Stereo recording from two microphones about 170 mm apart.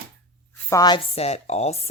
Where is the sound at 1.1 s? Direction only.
40° left (ahead or behind).